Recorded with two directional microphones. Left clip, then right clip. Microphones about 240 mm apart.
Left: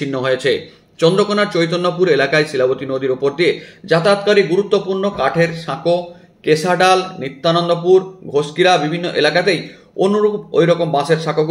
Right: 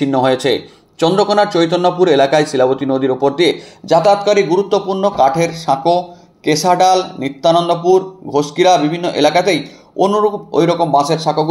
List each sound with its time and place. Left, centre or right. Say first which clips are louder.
0.0 s a man's voice: right 4 dB; centre